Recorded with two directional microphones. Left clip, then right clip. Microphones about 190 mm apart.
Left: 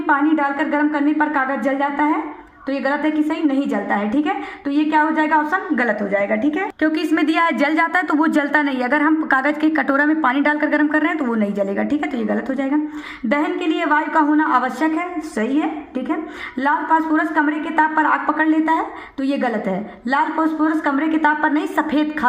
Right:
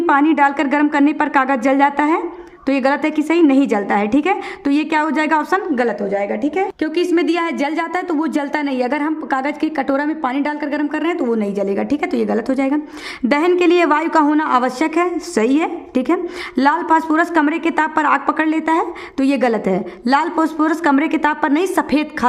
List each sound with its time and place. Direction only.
0.0 s a woman's voice: 40° right (ahead or behind)